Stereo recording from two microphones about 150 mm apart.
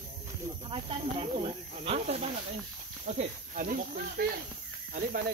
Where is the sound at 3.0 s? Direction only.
60° right (ahead or behind).